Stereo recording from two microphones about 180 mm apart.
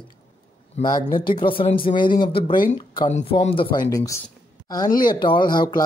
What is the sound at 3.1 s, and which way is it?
A woman's voice, 40° left (ahead or behind).